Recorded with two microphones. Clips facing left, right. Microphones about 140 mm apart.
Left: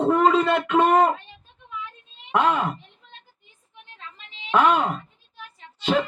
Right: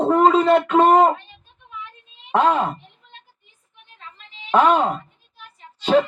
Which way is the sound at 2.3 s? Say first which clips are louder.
Right 3 dB; 30° right (ahead or behind).